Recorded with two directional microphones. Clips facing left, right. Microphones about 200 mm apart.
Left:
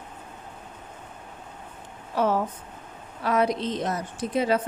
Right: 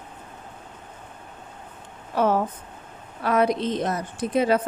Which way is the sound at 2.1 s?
55° right (ahead or behind).